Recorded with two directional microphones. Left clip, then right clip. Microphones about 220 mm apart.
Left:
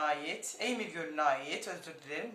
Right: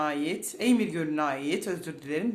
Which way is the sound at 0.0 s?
35° right (ahead or behind).